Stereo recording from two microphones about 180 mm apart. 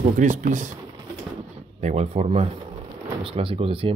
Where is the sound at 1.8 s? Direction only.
40° right (ahead or behind).